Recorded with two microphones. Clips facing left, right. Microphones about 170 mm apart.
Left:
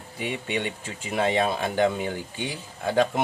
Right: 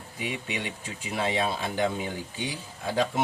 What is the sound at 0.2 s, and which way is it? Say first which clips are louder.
Speech: left 4 dB; 50° left (ahead or behind).